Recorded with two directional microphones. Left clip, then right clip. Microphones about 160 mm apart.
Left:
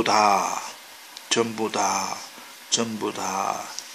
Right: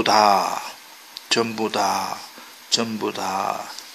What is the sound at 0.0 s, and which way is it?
Speech, 20° right (ahead or behind).